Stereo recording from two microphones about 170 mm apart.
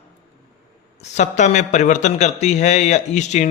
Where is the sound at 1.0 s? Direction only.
45° left (ahead or behind).